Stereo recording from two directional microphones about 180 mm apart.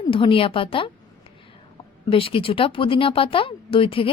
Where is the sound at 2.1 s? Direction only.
30° left (ahead or behind).